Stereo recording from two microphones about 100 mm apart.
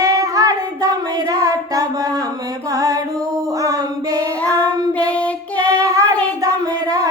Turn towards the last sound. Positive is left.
turn(degrees=-35)  # may be behind; listen again after turning